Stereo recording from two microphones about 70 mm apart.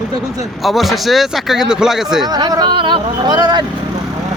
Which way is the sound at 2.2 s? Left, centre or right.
Right.